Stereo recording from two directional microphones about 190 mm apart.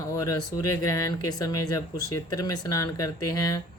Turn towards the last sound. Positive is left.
turn(degrees=20)  # may be behind; listen again after turning